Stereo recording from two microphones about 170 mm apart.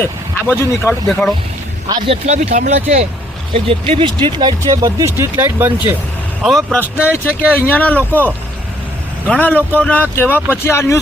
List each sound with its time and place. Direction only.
0.0 s speech: 15° left (ahead or behind)
1.9 s speech: 25° right (ahead or behind)
2.2 s speech: 40° right (ahead or behind); by 5.7 s 10° right (ahead or behind)
6.4 s speech: centre (ahead or behind)
9.2 s speech: 10° left (ahead or behind)